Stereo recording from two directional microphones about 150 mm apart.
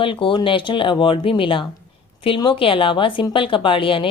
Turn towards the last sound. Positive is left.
turn(degrees=35)  # may be behind; listen again after turning